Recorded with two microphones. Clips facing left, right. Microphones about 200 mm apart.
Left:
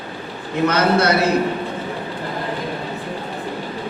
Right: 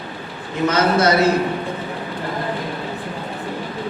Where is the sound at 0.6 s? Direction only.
60° left (ahead or behind).